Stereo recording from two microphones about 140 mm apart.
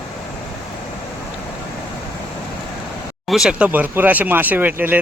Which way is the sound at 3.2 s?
Centre (ahead or behind).